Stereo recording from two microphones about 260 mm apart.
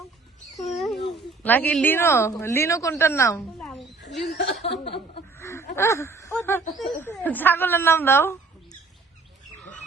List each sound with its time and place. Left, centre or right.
0.8 s speech: centre
4.3 s speech: left
5.4 s a sound: centre
5.7 s a woman's voice: centre